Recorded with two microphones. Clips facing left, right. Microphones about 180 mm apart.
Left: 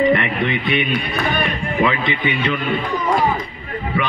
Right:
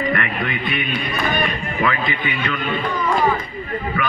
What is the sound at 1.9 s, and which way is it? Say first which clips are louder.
Speech: left 2 dB; 25° left (ahead or behind).